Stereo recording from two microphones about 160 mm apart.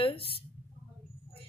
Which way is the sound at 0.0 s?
35° left (ahead or behind).